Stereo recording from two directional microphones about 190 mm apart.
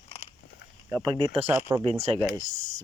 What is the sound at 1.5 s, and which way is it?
Speech, 10° right (ahead or behind).